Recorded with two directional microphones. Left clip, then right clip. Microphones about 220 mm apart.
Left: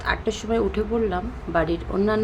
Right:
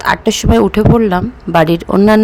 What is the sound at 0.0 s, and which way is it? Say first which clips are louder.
Speech: right 12 dB; 50° right (ahead or behind).